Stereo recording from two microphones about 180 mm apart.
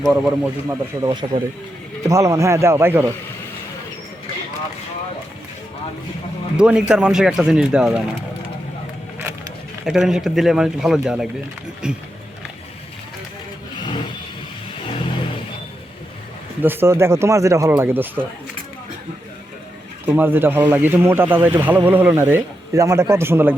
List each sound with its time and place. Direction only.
0.0 s speech: 5° right (ahead or behind)
0.7 s speech: 20° right (ahead or behind)
6.6 s speech: 5° right (ahead or behind)
9.8 s speech: 5° right (ahead or behind)
16.6 s speech: 15° right (ahead or behind)
20.1 s speech: 10° right (ahead or behind)